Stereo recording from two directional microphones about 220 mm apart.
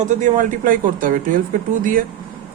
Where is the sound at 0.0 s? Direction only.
35° right (ahead or behind).